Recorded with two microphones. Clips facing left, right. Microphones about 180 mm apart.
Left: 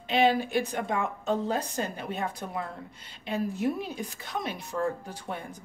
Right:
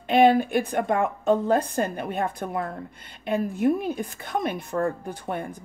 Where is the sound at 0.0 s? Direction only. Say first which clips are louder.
Right 6 dB; 55° right (ahead or behind).